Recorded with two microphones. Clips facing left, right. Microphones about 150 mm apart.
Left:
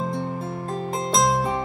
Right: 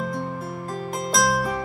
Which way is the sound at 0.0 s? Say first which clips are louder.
Left 1 dB; 25° left (ahead or behind).